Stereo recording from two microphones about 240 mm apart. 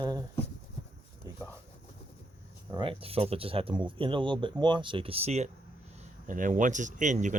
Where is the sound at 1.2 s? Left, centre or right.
Centre.